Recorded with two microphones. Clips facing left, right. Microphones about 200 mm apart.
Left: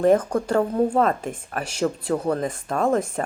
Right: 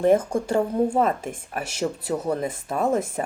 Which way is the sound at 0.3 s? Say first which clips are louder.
Left 1 dB; 10° right (ahead or behind).